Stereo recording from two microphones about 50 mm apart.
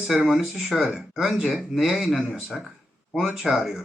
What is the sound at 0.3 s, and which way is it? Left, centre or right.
Speech, centre.